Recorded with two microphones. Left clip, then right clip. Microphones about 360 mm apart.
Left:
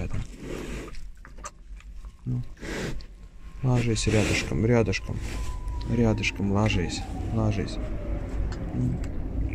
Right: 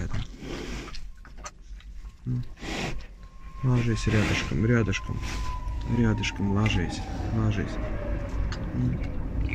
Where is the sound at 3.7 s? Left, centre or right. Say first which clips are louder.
Left 2 dB; centre.